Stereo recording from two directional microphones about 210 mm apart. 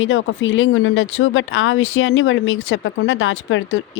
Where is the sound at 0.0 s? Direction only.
65° left (ahead or behind).